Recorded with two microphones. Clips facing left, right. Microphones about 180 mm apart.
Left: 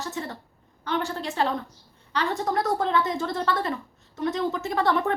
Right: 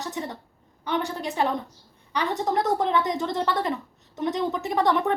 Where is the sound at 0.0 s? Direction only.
20° right (ahead or behind).